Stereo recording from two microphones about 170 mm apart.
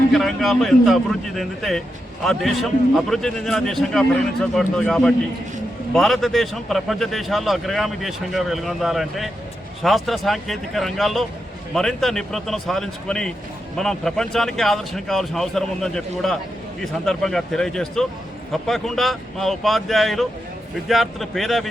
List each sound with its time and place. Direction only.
0.1 s a man's voice: centre (ahead or behind)